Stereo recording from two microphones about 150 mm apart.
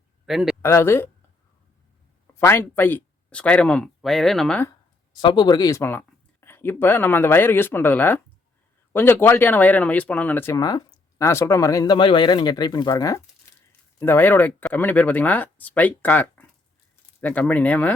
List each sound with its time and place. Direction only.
0.3 s speech: centre (ahead or behind)
0.6 s speech: 15° left (ahead or behind)
2.4 s speech: 15° left (ahead or behind)
5.2 s speech: 30° left (ahead or behind); by 17.9 s 10° left (ahead or behind)